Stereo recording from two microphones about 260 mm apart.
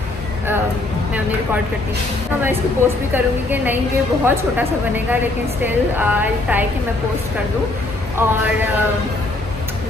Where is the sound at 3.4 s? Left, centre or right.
Centre.